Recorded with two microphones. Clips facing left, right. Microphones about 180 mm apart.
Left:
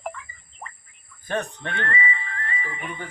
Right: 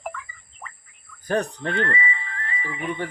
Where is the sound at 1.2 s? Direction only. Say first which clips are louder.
Right 4 dB; 35° right (ahead or behind).